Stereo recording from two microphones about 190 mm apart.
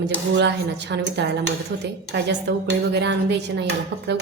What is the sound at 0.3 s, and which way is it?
A woman's voice, 65° right (ahead or behind).